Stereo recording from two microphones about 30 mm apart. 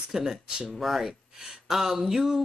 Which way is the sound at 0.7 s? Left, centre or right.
Centre.